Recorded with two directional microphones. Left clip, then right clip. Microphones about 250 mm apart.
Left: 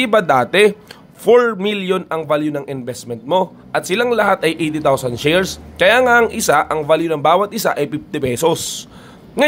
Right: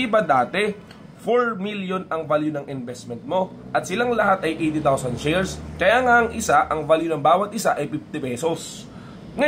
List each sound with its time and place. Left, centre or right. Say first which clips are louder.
0.0 s a man's voice: left 5 dB; left